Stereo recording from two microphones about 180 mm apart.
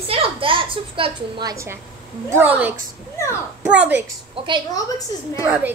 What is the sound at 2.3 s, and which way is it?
A woman's voice, 10° right (ahead or behind).